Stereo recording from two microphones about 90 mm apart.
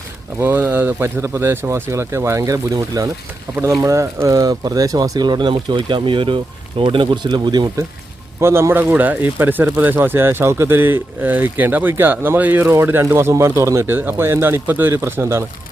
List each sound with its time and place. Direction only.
0.3 s speech: 25° right (ahead or behind)
4.4 s speech: 45° right (ahead or behind)
8.4 s speech: 30° right (ahead or behind)